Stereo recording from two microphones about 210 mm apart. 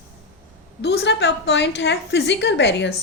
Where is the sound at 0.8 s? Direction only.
50° left (ahead or behind).